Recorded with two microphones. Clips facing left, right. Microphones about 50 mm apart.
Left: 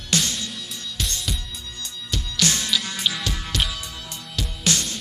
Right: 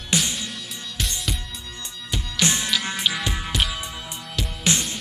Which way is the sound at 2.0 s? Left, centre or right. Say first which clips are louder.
Right 1 dB; centre.